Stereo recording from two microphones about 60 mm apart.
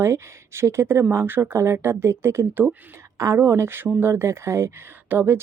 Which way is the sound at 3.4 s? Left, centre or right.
Right.